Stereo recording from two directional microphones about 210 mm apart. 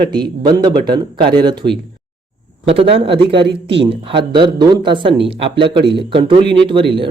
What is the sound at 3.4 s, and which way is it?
Speech, 55° right (ahead or behind).